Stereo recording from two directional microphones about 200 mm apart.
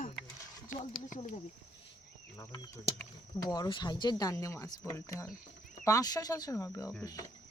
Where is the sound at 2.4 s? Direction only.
15° left (ahead or behind).